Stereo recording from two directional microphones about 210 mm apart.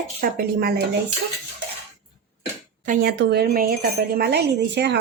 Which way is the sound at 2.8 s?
40° right (ahead or behind).